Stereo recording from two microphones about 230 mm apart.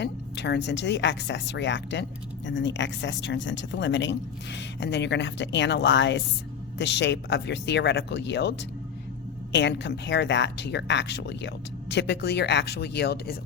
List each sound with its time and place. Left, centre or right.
0.0 s speech: left